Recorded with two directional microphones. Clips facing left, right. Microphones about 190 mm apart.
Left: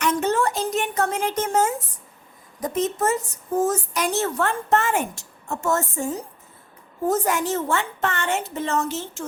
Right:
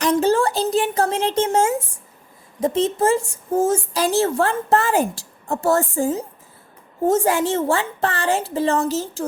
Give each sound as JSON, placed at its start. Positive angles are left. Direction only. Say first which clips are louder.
{"t": 0.0, "sound": "a woman's voice", "louder": "right 4 dB", "side_deg": -35}